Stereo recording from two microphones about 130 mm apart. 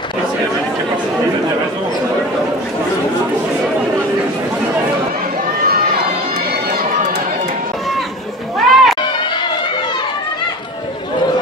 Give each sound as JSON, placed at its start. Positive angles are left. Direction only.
{"t": 8.5, "sound": "music", "side_deg": 0}